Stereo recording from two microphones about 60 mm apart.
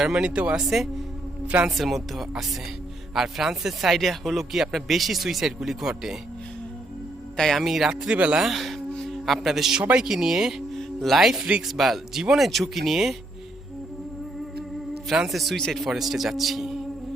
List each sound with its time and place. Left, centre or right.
0.0 s speech: centre
1.5 s speech: centre
1.7 s speech: centre
7.3 s speech: centre
7.6 s speech: centre
8.4 s speech: centre
11.8 s speech: centre
15.3 s speech: centre